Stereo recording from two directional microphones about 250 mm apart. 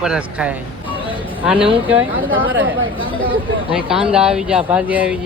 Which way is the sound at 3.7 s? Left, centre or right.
Centre.